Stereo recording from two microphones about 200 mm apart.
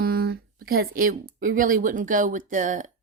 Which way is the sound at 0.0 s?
50° right (ahead or behind).